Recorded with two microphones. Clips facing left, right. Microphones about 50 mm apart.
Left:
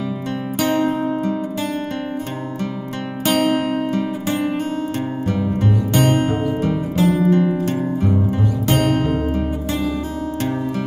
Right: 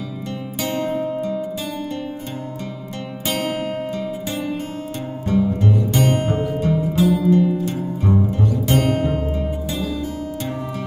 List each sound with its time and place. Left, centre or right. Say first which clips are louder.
0.6 s music: left 4 dB; left
3.3 s music: left 6 dB; left
8.6 s music: left 2 dB; left